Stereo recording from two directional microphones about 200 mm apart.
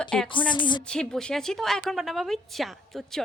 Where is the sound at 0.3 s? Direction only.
25° left (ahead or behind).